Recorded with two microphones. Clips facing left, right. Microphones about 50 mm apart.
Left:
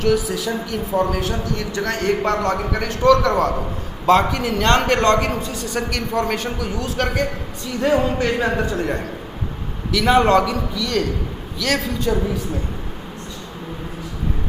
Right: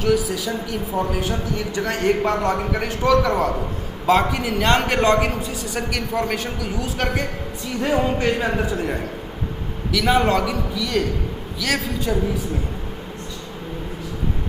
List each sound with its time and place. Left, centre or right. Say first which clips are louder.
0.0 s a man's voice: left 1 dB; centre